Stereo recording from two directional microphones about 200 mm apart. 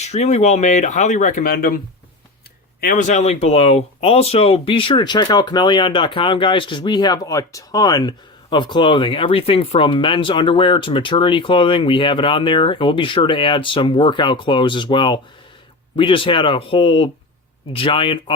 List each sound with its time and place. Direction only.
0.0 s speech: 35° left (ahead or behind)
2.8 s speech: 40° left (ahead or behind); by 18.2 s 25° left (ahead or behind)